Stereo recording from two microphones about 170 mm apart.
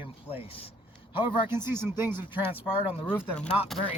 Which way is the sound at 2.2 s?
30° left (ahead or behind).